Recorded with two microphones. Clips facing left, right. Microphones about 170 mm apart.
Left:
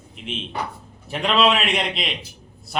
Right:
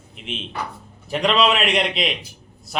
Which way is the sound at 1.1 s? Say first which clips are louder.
Right 1 dB; centre (ahead or behind).